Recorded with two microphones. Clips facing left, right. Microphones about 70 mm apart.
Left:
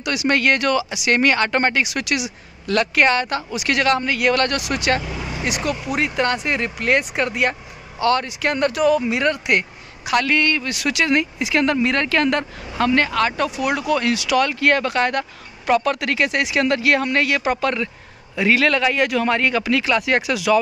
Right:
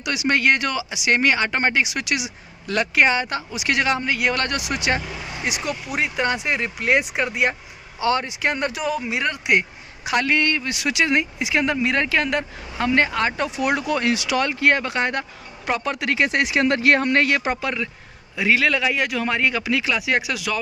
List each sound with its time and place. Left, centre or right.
0.0 s speech: centre
10.0 s speech: right
17.6 s speech: centre